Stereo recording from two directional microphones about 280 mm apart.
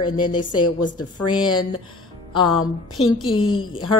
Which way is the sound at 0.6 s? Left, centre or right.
Left.